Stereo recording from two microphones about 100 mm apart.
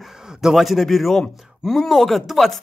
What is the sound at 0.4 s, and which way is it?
Speech, 5° right (ahead or behind).